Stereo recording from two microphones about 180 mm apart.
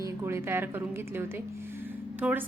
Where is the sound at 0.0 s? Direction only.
15° right (ahead or behind).